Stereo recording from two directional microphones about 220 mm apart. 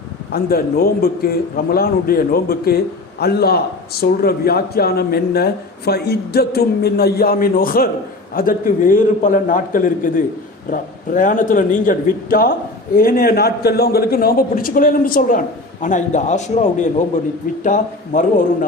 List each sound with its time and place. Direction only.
0.3 s a man's voice: 45° left (ahead or behind)